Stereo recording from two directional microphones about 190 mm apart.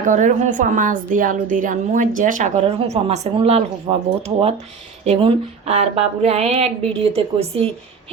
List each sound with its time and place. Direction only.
0.0 s a woman's voice: 40° right (ahead or behind)